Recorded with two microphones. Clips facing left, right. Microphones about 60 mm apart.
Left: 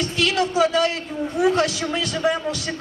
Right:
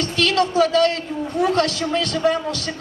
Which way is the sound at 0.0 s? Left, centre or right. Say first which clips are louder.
Right 2 dB; centre.